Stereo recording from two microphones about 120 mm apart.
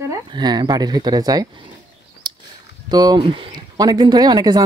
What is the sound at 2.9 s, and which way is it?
Speech, 35° right (ahead or behind).